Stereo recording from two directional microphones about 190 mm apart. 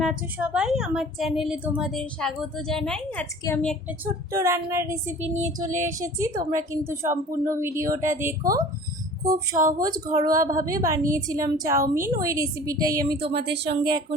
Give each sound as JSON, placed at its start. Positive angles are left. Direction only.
{"t": 0.0, "sound": "a woman's voice", "side_deg": -5}
{"t": 4.0, "sound": "a woman's voice", "side_deg": -15}
{"t": 5.2, "sound": "a sound", "side_deg": -35}
{"t": 5.7, "sound": "a woman's voice", "side_deg": -15}
{"t": 13.3, "sound": "speech", "side_deg": -60}
{"t": 13.7, "sound": "speech", "side_deg": -25}